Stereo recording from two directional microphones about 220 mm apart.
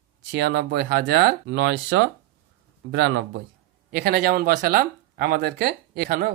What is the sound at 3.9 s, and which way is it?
Speech, 40° right (ahead or behind).